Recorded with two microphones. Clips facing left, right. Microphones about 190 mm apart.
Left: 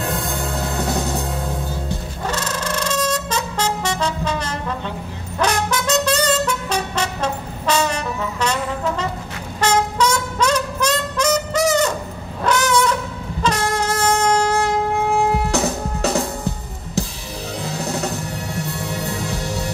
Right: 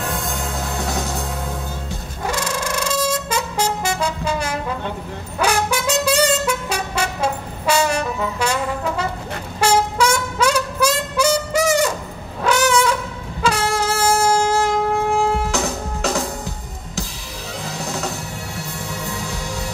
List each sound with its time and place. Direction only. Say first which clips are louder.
2.2 s brass instrument: right 1 dB; 10° right (ahead or behind)
9.6 s trumpet: right 1 dB; 10° right (ahead or behind)
12.4 s brass instrument: right 1 dB; 10° right (ahead or behind)
13.4 s music: right 1 dB; 10° right (ahead or behind)
15.5 s music: left 2 dB; 35° left (ahead or behind)
18.5 s music: left 5 dB; 35° left (ahead or behind)